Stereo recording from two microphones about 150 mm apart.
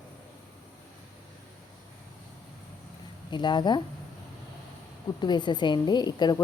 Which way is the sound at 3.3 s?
30° left (ahead or behind).